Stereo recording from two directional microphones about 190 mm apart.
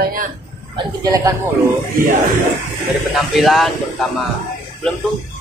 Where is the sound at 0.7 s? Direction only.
20° right (ahead or behind).